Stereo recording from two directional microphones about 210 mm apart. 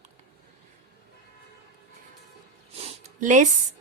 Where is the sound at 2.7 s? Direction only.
30° right (ahead or behind).